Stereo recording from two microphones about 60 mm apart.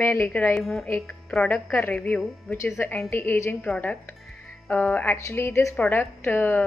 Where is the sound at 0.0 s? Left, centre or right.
Left.